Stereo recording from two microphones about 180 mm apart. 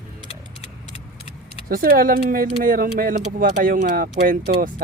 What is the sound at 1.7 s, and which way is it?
Speech, 55° right (ahead or behind).